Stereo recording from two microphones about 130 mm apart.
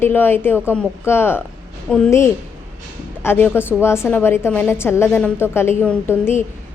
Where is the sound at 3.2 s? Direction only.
15° left (ahead or behind).